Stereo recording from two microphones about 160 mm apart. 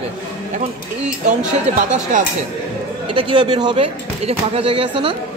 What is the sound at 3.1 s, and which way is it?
Speech, 30° right (ahead or behind).